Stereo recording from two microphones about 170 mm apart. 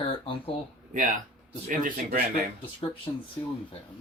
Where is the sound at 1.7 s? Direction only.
55° right (ahead or behind).